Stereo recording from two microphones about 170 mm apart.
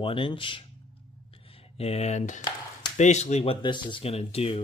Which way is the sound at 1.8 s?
40° left (ahead or behind).